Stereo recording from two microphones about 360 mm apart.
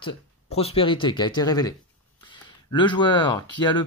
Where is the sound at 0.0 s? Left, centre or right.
Centre.